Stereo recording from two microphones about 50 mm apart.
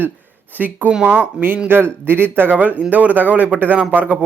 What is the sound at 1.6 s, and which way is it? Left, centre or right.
Speech, right.